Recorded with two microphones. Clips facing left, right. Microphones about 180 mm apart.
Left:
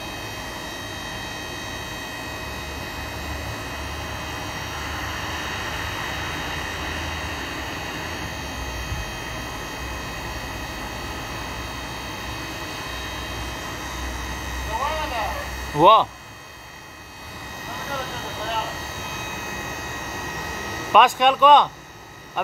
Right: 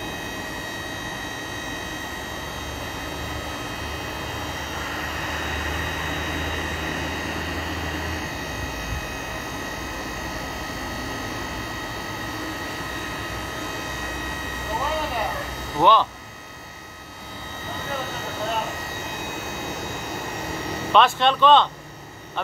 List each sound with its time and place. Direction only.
15.8 s speech: 15° left (ahead or behind)
20.9 s speech: 10° left (ahead or behind)